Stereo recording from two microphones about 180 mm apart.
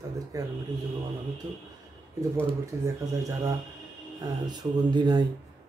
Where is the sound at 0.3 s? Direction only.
20° right (ahead or behind).